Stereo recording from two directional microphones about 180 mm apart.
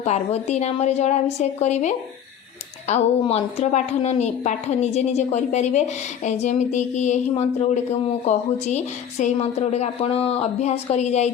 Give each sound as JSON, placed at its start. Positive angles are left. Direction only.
{"t": 0.0, "sound": "a woman's voice", "side_deg": 35}